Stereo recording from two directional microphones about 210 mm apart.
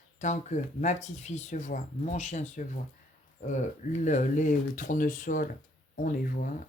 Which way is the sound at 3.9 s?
35° left (ahead or behind).